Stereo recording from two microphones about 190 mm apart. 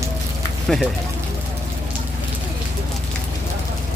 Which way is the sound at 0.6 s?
Centre (ahead or behind).